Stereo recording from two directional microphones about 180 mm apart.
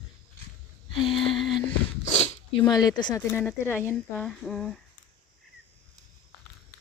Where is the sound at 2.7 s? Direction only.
25° left (ahead or behind).